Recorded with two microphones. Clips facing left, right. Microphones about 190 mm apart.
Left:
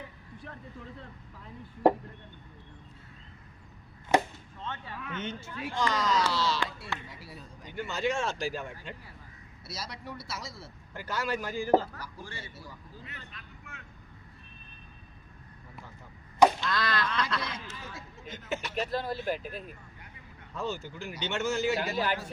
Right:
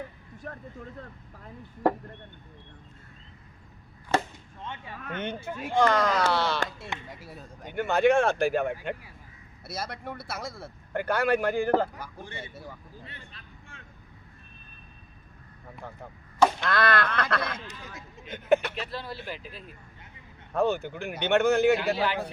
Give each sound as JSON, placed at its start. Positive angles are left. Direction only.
{"t": 0.3, "sound": "a sound", "side_deg": -45}
{"t": 1.8, "sound": "speech", "side_deg": 20}
{"t": 4.1, "sound": "chop", "side_deg": 15}
{"t": 4.6, "sound": "speech", "side_deg": -15}
{"t": 4.9, "sound": "speech", "side_deg": -55}
{"t": 13.1, "sound": "vehicle", "side_deg": -30}
{"t": 15.8, "sound": "speech", "side_deg": -60}
{"t": 18.7, "sound": "speech", "side_deg": 45}
{"t": 20.5, "sound": "speech", "side_deg": -60}
{"t": 21.9, "sound": "speech", "side_deg": 45}